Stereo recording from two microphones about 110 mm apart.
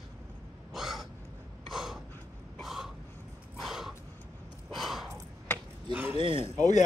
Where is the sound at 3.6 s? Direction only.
Centre (ahead or behind).